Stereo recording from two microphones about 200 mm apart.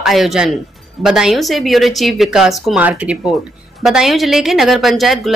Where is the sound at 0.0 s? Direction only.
Centre (ahead or behind).